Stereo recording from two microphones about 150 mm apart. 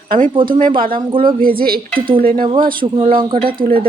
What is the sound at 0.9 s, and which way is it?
Speech, 35° right (ahead or behind).